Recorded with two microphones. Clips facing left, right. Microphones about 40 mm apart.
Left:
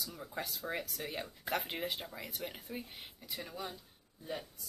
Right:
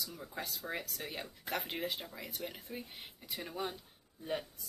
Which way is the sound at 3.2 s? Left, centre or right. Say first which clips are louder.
Right 3 dB; centre.